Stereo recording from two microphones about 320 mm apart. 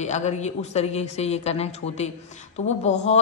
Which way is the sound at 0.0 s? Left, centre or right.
Left.